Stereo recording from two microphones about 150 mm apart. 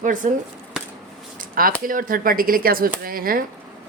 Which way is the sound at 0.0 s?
60° right (ahead or behind).